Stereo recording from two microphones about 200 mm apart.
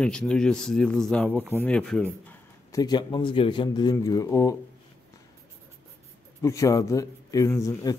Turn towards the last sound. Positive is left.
turn(degrees=15)  # may be behind; listen again after turning